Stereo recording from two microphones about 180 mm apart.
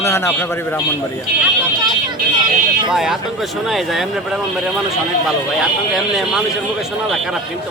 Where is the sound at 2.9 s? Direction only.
Centre (ahead or behind).